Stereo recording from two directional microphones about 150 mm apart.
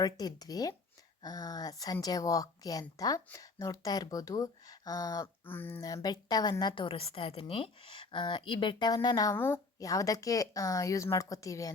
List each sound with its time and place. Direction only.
0.0 s a woman's voice: 25° left (ahead or behind)
5.8 s a woman's voice: 25° left (ahead or behind)